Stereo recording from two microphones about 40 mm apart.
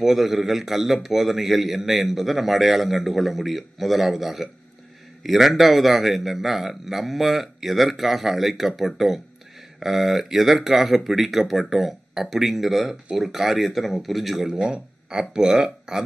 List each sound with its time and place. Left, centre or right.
0.0 s a man's voice: centre
14.6 s speech: centre